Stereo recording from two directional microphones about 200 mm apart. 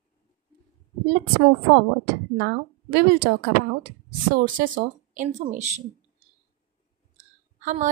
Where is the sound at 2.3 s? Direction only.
55° right (ahead or behind).